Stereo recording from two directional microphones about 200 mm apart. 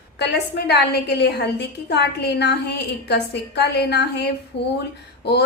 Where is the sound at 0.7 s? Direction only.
55° left (ahead or behind).